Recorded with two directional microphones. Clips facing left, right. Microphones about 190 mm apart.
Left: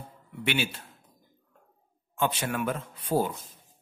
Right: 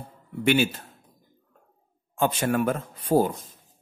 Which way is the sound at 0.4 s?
45° right (ahead or behind).